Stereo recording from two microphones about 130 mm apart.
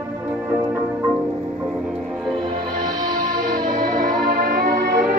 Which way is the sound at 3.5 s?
90° right.